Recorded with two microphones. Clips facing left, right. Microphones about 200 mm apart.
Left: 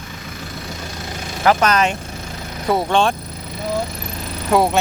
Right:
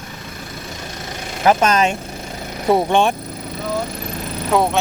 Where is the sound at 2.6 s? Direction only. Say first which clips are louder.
Right 2 dB; 20° right (ahead or behind).